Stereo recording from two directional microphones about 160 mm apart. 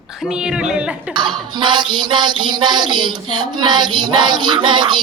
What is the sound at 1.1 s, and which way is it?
Music, 30° right (ahead or behind).